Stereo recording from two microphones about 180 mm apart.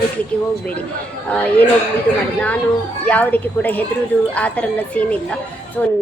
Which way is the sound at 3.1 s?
10° left (ahead or behind).